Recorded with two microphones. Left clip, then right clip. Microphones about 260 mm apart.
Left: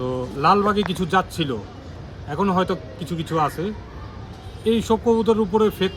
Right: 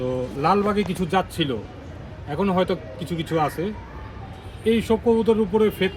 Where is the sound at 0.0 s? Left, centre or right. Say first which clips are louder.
Left 2 dB; centre.